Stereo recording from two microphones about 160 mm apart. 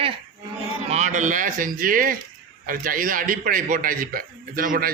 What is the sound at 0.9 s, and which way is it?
A man's voice, 50° right (ahead or behind).